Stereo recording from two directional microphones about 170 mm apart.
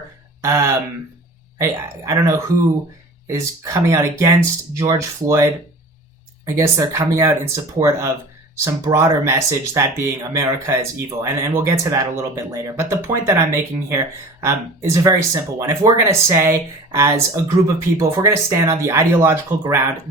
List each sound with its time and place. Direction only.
0.4 s speech: 15° right (ahead or behind)